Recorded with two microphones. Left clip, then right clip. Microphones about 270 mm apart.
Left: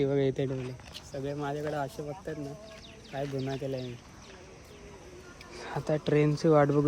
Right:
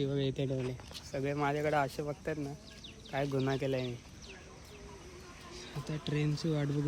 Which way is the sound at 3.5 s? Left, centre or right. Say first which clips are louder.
Right 1 dB; right.